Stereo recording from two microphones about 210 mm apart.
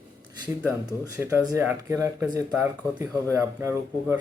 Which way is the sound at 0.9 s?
15° right (ahead or behind).